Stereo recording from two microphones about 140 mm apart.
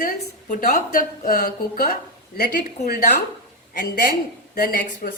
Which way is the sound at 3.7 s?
85° left.